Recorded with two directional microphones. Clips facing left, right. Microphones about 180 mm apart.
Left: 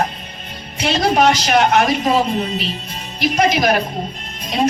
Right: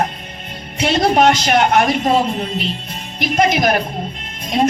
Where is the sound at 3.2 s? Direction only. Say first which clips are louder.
Even; 50° right (ahead or behind).